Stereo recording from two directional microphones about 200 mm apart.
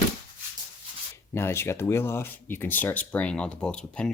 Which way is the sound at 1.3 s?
10° left (ahead or behind).